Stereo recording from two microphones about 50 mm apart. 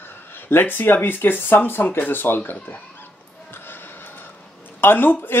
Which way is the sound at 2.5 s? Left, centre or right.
Left.